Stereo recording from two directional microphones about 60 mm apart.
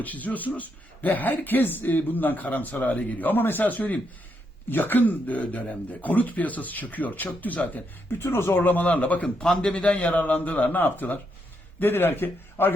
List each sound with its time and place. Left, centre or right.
0.0 s speech: left
8.2 s a man's voice: left